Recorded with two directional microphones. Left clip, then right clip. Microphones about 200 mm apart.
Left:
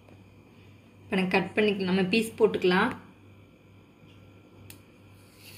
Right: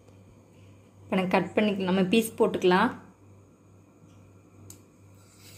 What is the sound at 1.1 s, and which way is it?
A woman's voice, 35° right (ahead or behind).